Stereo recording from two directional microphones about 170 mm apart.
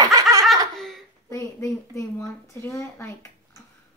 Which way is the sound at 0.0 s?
20° right (ahead or behind).